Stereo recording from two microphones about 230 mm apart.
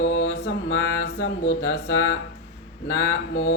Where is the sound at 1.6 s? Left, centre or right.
Left.